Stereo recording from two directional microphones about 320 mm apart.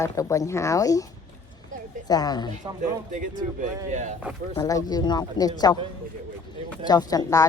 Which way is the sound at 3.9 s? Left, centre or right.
Right.